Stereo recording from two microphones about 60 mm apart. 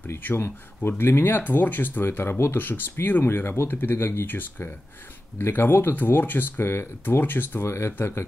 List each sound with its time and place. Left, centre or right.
0.0 s speech: left